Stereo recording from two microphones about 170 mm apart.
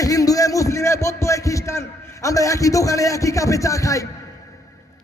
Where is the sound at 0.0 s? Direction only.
20° left (ahead or behind).